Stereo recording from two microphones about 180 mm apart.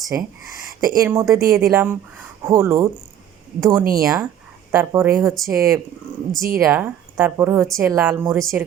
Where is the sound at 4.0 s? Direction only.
Centre (ahead or behind).